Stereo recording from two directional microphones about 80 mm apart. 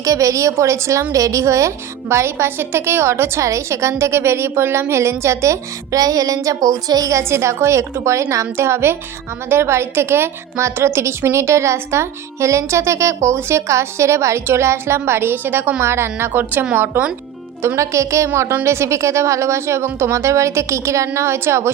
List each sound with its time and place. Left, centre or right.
0.0 s a woman's voice: right
7.2 s a woman's voice: right